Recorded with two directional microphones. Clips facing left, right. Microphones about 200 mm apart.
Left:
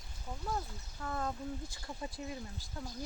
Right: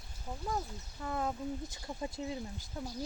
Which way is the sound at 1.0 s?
20° right (ahead or behind).